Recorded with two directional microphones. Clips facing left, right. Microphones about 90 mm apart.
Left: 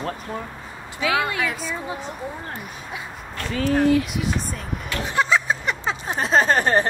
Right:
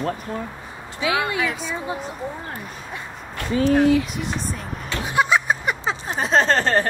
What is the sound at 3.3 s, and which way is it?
Speech, 20° right (ahead or behind).